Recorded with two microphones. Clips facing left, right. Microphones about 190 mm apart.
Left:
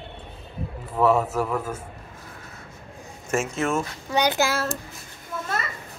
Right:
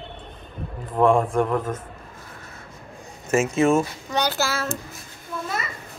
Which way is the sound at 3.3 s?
Centre (ahead or behind).